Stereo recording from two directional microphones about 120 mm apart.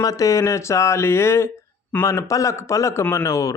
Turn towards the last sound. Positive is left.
turn(degrees=25)  # may be behind; listen again after turning